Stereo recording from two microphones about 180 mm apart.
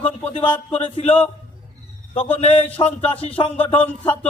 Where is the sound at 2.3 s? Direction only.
35° left (ahead or behind).